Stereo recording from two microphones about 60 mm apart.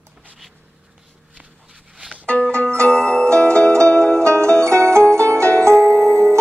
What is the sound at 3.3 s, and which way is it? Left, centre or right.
Music, centre.